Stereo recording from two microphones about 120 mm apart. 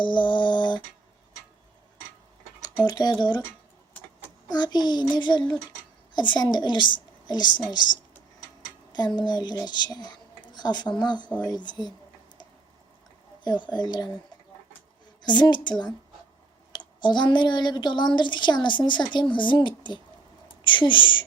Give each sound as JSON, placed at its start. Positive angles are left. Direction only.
{"t": 0.0, "sound": "a sound", "side_deg": 40}
{"t": 2.6, "sound": "speech", "side_deg": 35}
{"t": 4.4, "sound": "a woman's voice", "side_deg": 35}
{"t": 13.4, "sound": "a woman's voice", "side_deg": 35}
{"t": 15.2, "sound": "a woman's voice", "side_deg": 40}
{"t": 16.7, "sound": "a woman's voice", "side_deg": 40}